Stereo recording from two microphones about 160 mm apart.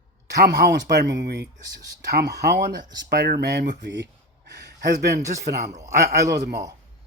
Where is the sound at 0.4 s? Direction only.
90° right.